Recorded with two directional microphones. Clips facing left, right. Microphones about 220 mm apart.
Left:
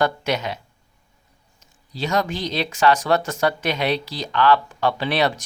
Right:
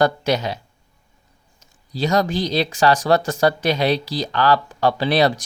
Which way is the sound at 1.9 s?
35° right (ahead or behind).